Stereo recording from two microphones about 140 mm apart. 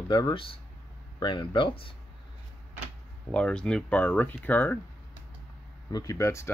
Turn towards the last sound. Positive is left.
turn(degrees=20)  # may be behind; listen again after turning